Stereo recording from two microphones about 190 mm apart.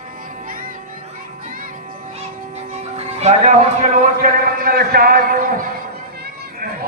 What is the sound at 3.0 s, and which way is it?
A man's voice, 35° right (ahead or behind).